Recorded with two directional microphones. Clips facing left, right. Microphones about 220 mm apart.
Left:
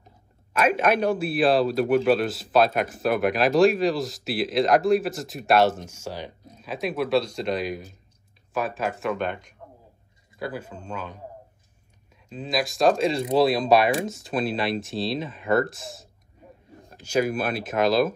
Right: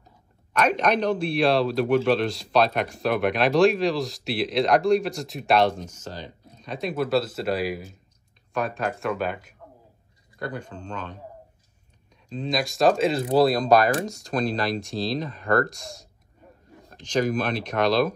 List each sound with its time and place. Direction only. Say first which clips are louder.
0.5 s speech: left 1 dB; 5° left (ahead or behind)
10.4 s speech: even; 5° left (ahead or behind)
12.3 s speech: even; 5° left (ahead or behind)